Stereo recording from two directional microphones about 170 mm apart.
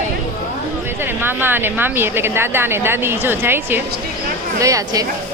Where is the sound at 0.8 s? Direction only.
15° right (ahead or behind).